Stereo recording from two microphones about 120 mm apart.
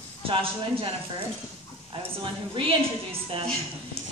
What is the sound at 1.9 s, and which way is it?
A woman's voice, 45° right (ahead or behind).